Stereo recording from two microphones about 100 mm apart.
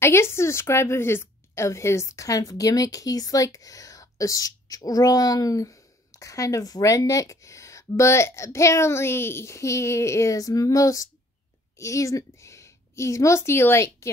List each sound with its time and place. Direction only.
0.0 s a woman's voice: 25° left (ahead or behind)